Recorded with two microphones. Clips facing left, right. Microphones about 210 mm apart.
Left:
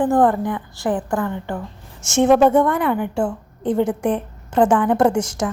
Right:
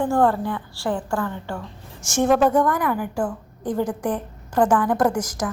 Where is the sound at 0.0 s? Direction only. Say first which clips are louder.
Left 3 dB; 20° left (ahead or behind).